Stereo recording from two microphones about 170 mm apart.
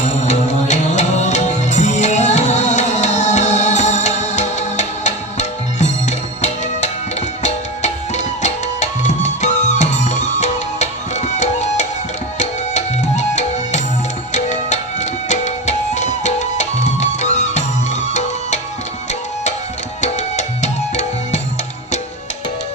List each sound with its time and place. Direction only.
0.3 s music: 45° left (ahead or behind)
20.0 s music: 45° left (ahead or behind)